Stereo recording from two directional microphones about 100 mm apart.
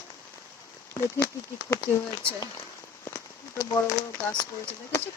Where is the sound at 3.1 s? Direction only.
35° left (ahead or behind).